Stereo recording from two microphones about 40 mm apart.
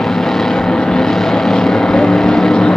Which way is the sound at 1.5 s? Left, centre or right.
Centre.